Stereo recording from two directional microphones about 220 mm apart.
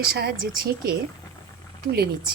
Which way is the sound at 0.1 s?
45° right (ahead or behind).